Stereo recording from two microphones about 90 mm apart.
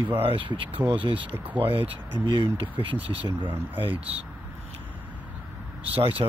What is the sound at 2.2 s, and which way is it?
Speech, 70° right (ahead or behind).